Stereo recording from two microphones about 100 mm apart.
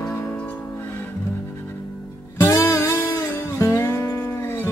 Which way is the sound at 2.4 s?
30° left (ahead or behind).